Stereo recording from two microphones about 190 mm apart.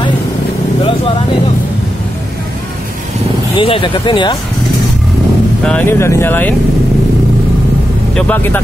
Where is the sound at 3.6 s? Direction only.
30° left (ahead or behind).